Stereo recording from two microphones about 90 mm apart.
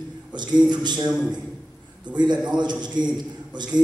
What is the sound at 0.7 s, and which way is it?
Speech, 55° right (ahead or behind).